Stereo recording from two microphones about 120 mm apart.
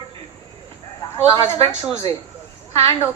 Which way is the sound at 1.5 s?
55° right (ahead or behind).